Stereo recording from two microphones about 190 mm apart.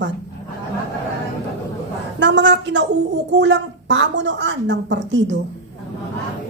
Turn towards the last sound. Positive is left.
turn(degrees=-70)  # may be behind; listen again after turning